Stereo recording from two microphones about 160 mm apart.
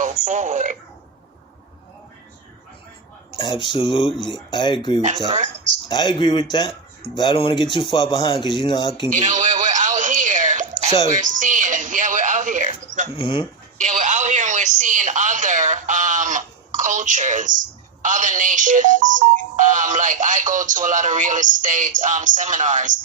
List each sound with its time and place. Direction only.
0.0 s speech: 50° right (ahead or behind)
3.3 s speech: 30° left (ahead or behind)
5.3 s speech: 50° right (ahead or behind)
5.9 s speech: 30° left (ahead or behind)
9.1 s a sound: 50° right (ahead or behind)
11.0 s music: 50° right (ahead or behind)
13.1 s speech: 30° left (ahead or behind)
13.7 s speech: 50° right (ahead or behind)